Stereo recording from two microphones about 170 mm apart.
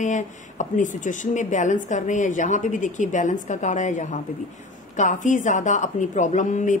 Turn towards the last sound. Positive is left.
turn(degrees=45)  # may be behind; listen again after turning